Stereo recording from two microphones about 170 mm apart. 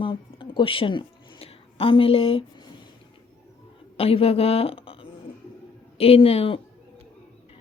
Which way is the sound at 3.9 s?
35° left (ahead or behind).